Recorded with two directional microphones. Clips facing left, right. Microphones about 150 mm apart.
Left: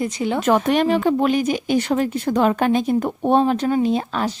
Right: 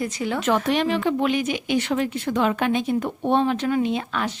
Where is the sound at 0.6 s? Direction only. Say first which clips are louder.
Left 4 dB; 45° left (ahead or behind).